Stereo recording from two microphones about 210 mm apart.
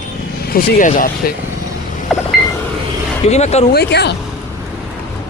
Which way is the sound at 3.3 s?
30° left (ahead or behind).